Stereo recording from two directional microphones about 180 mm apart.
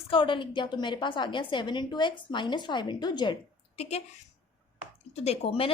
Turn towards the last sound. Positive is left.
turn(degrees=30)  # may be behind; listen again after turning